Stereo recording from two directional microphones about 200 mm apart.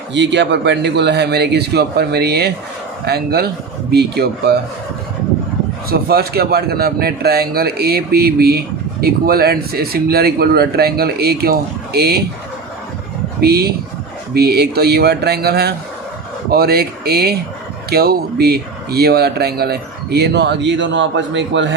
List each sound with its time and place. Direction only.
0.1 s a man's voice: 60° right (ahead or behind)
5.9 s a man's voice: 50° right (ahead or behind)
13.4 s a man's voice: 50° right (ahead or behind)